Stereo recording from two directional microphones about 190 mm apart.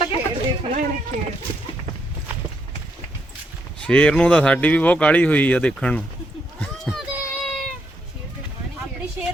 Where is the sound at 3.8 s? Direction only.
5° left (ahead or behind).